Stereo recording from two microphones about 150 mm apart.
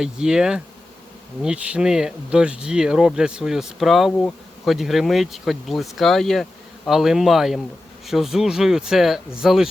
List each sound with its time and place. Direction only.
0.0 s speech: 5° right (ahead or behind)